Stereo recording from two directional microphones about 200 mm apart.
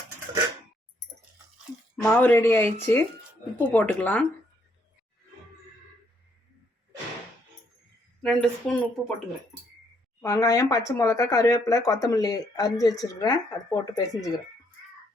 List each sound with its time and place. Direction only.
2.0 s speech: 10° left (ahead or behind)
8.2 s speech: 5° left (ahead or behind)
10.2 s speech: 15° left (ahead or behind)